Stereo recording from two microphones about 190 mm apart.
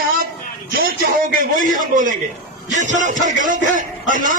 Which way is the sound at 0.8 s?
50° right (ahead or behind).